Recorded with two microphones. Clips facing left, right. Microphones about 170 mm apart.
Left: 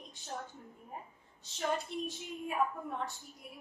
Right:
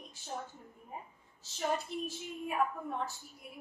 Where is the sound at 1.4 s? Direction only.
5° right (ahead or behind).